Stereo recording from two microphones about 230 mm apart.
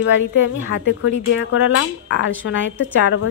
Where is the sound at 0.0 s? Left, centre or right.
Left.